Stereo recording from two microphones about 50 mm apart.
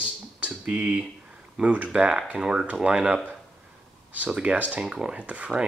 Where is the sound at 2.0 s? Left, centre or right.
Centre.